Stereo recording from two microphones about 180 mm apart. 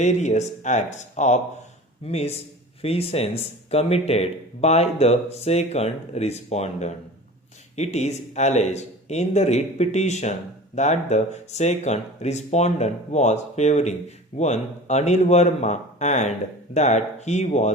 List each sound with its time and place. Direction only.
0.0 s speech: 40° left (ahead or behind)